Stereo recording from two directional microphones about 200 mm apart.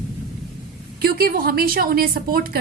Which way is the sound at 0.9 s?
50° right (ahead or behind).